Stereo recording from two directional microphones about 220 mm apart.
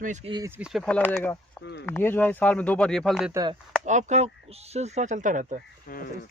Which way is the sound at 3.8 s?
30° right (ahead or behind).